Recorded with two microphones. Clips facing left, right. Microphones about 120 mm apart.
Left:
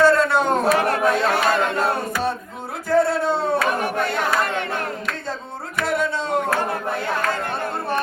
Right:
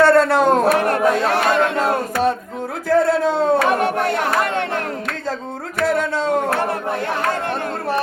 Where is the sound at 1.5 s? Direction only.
70° right (ahead or behind).